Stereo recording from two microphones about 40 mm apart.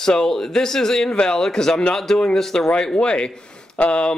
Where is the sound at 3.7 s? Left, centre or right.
Left.